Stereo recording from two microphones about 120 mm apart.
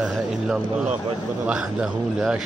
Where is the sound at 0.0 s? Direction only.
5° right (ahead or behind).